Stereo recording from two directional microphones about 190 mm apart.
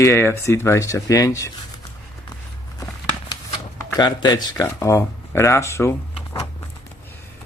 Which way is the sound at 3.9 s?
25° left (ahead or behind).